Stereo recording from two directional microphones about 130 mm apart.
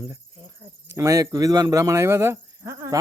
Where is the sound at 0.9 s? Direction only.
25° right (ahead or behind).